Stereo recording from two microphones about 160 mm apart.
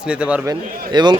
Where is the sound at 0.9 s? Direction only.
25° right (ahead or behind).